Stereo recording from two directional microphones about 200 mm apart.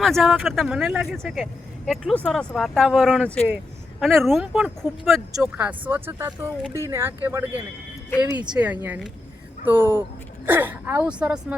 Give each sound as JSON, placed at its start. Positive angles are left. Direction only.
{"t": 0.0, "sound": "speech", "side_deg": 0}